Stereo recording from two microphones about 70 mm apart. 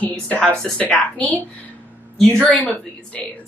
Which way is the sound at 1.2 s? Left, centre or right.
Left.